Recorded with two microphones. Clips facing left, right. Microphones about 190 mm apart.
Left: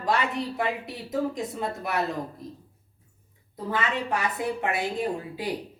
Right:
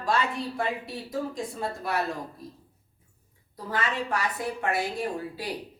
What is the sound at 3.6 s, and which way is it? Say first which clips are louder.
A woman's voice: left 2 dB; 20° left (ahead or behind).